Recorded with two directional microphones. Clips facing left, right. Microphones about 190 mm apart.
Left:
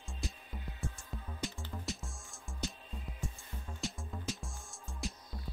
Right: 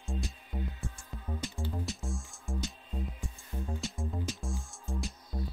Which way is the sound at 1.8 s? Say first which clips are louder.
Right 5 dB; centre (ahead or behind).